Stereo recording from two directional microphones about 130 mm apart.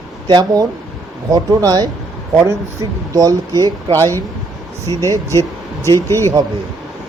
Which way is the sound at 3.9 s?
15° left (ahead or behind).